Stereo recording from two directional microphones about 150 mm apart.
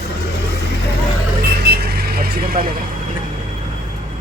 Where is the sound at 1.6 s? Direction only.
90° right.